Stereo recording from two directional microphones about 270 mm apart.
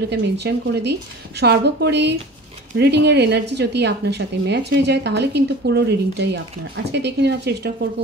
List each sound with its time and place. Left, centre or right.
0.1 s a woman's voice: right